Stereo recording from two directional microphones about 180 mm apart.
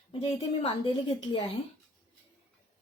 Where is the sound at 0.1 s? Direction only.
30° left (ahead or behind).